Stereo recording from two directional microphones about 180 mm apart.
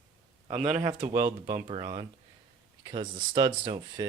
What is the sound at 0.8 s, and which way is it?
Speech, 25° right (ahead or behind).